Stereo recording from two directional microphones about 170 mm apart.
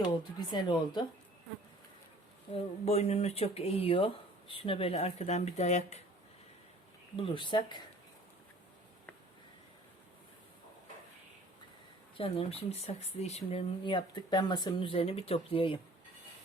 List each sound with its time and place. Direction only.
0.3 s speech: 25° left (ahead or behind)
2.5 s speech: 35° left (ahead or behind)
7.2 s speech: 30° left (ahead or behind)
12.1 s speech: 35° left (ahead or behind)